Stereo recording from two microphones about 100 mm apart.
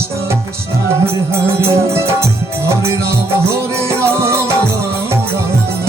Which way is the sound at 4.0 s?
25° right (ahead or behind).